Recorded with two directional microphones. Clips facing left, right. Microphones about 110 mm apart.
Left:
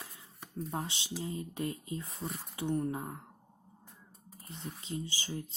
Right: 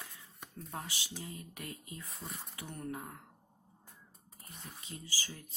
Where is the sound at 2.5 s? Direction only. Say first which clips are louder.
Left 11 dB; 25° left (ahead or behind).